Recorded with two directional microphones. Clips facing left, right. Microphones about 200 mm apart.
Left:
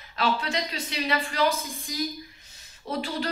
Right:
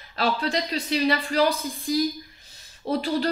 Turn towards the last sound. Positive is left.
turn(degrees=-35)  # may be behind; listen again after turning